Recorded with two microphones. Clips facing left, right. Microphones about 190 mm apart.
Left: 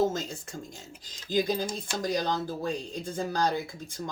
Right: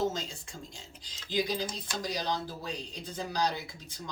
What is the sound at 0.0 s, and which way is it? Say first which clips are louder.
Speech: left 5 dB; 50° left (ahead or behind).